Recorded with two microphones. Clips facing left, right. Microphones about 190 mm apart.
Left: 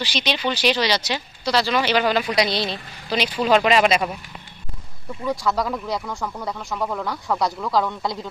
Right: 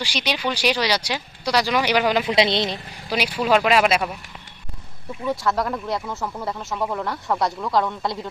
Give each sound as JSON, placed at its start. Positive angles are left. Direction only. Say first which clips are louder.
{"t": 0.0, "sound": "speech", "louder": "left 1 dB", "side_deg": -10}
{"t": 3.1, "sound": "speech", "louder": "left 1 dB", "side_deg": -10}
{"t": 5.2, "sound": "speech", "louder": "even", "side_deg": 0}